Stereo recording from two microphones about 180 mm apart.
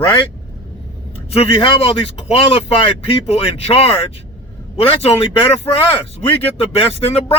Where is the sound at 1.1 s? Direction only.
35° left (ahead or behind).